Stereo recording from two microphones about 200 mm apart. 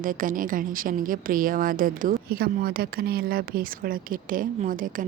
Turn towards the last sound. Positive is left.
turn(degrees=-40)  # may be behind; listen again after turning